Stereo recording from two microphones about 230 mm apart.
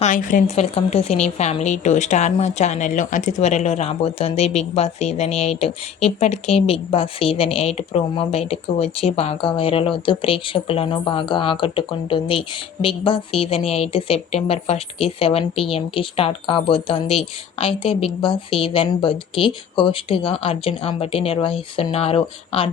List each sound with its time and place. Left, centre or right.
0.0 s a woman's voice: left